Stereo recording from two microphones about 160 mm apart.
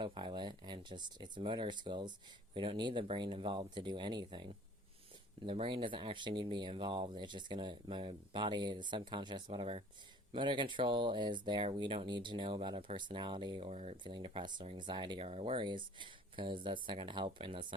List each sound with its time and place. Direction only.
0.0 s speech: 30° right (ahead or behind)
5.5 s speech: 30° right (ahead or behind)
13.7 s speech: 45° right (ahead or behind)
13.9 s speech: 30° right (ahead or behind)